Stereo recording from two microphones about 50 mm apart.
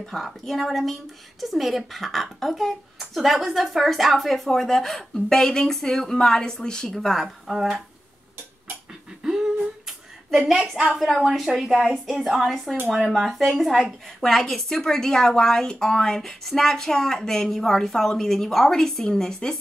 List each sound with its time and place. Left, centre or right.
0.1 s speech: centre
9.2 s humming: centre
11.1 s a woman's voice: centre